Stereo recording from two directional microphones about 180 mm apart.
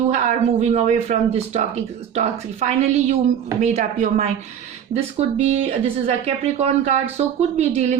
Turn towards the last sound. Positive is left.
turn(degrees=-35)  # may be behind; listen again after turning